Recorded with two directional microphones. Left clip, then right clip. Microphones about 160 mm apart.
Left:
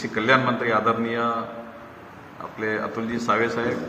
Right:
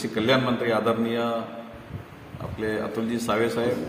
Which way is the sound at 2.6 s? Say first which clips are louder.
Left 1 dB; 15° right (ahead or behind).